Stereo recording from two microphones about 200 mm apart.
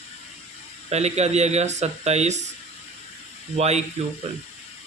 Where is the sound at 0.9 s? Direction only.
35° right (ahead or behind).